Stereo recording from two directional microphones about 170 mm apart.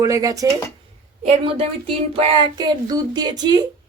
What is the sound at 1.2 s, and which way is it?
Speech, 35° right (ahead or behind).